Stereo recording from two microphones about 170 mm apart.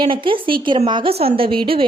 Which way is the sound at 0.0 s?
30° right (ahead or behind).